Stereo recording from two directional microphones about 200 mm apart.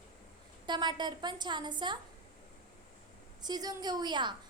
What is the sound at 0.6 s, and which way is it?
A child's voice, 20° right (ahead or behind).